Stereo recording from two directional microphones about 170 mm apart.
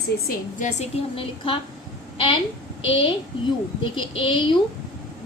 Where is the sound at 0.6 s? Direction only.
40° left (ahead or behind).